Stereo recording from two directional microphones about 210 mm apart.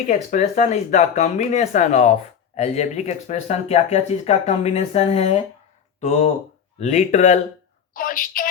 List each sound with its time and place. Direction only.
0.1 s a woman's voice: 35° left (ahead or behind)